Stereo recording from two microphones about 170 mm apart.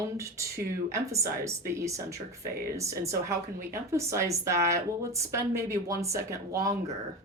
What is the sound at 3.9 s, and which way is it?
Speech, 15° right (ahead or behind).